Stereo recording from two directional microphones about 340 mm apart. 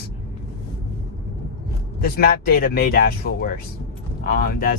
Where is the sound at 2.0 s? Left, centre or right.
Left.